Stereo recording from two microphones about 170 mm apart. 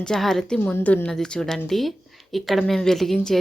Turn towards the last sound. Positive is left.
turn(degrees=0)  # may be behind; listen again after turning